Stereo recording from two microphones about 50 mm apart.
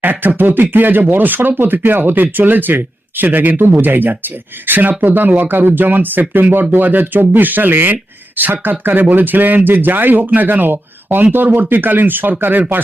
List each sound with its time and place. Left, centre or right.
0.0 s speech: right